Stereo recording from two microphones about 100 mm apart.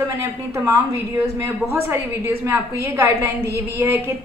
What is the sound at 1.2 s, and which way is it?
A woman's voice, 25° right (ahead or behind).